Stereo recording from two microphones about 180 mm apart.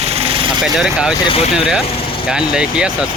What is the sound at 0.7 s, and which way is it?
Speech, 5° right (ahead or behind).